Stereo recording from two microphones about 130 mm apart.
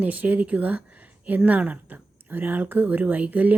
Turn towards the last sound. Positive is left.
turn(degrees=-10)  # may be behind; listen again after turning